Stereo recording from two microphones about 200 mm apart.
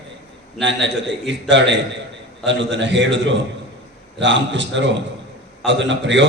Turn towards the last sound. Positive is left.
turn(degrees=-65)  # may be behind; listen again after turning